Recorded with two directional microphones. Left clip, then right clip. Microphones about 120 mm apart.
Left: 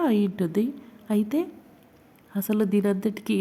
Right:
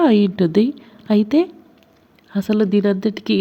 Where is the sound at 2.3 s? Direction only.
15° right (ahead or behind).